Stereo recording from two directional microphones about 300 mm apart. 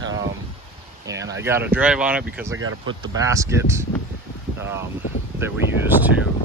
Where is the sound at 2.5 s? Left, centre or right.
Right.